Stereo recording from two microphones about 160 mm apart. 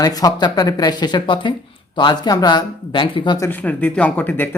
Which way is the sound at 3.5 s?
10° left (ahead or behind).